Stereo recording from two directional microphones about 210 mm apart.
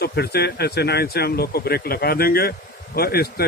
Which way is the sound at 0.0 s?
50° left (ahead or behind).